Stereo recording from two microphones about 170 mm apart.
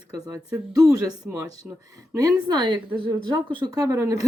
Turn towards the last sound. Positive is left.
turn(degrees=-20)  # may be behind; listen again after turning